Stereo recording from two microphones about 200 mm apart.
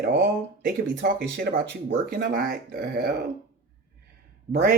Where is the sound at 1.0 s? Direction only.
60° right (ahead or behind).